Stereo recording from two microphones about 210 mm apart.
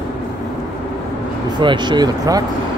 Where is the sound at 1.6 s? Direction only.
20° right (ahead or behind).